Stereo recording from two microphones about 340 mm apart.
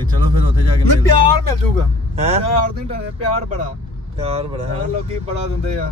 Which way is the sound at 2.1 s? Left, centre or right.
Centre.